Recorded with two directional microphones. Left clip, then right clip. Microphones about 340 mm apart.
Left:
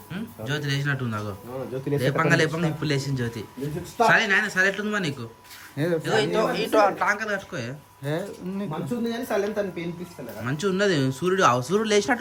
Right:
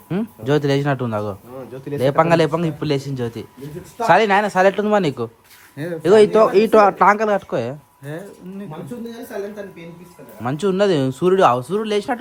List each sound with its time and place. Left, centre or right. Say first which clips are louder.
0.1 s a man's voice: right 12 dB; centre
5.7 s a man's voice: left 2 dB; centre
6.0 s a man's voice: right 14 dB; centre
8.0 s a man's voice: left 3 dB; centre